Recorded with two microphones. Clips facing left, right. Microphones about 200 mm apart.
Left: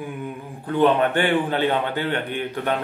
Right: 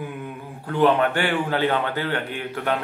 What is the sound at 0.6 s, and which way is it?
A man's voice, 20° left (ahead or behind).